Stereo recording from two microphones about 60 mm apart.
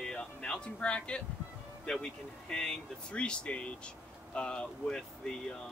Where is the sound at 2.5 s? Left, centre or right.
Centre.